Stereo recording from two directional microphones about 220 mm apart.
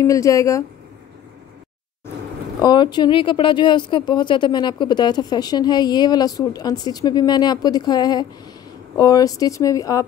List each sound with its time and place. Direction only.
0.0 s speech: 15° left (ahead or behind)
2.6 s speech: 20° left (ahead or behind)